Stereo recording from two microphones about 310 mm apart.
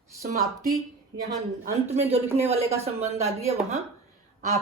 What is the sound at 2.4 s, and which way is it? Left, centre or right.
Speech, centre.